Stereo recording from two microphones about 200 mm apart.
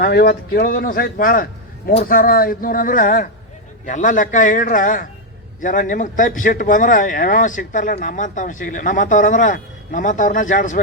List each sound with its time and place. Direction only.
0.0 s speech: 50° left (ahead or behind)